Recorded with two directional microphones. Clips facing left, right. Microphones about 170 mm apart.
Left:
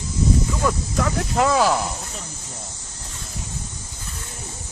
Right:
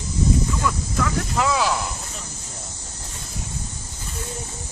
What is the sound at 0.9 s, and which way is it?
Speech, 45° left (ahead or behind).